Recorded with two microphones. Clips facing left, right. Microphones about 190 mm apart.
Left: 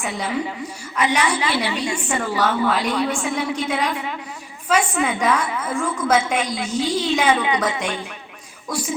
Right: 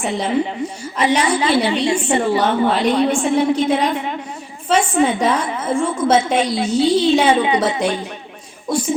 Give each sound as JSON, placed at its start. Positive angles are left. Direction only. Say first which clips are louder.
{"t": 0.0, "sound": "a woman's voice", "louder": "right 6 dB", "side_deg": -30}